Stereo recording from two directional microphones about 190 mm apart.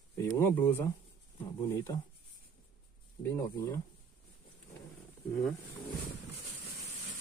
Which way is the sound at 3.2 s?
15° left (ahead or behind).